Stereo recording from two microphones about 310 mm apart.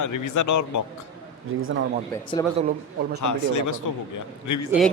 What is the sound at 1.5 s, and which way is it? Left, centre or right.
Speech, right.